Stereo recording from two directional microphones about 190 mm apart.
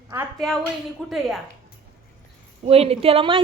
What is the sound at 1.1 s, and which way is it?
Speech, centre (ahead or behind).